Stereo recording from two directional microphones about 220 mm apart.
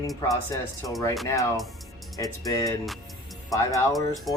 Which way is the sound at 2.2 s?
15° left (ahead or behind).